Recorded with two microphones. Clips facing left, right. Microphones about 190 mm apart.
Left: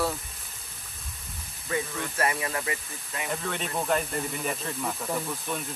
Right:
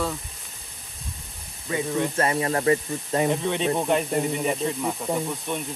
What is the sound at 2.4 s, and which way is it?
Speech, 40° right (ahead or behind).